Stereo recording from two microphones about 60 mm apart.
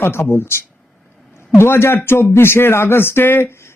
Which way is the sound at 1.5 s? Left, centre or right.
Left.